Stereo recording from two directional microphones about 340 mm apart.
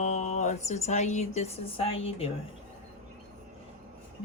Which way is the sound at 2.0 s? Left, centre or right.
Centre.